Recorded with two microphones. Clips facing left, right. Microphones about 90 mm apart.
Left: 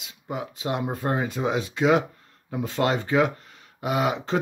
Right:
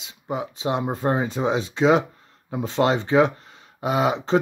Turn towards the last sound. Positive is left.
turn(degrees=-30)  # may be behind; listen again after turning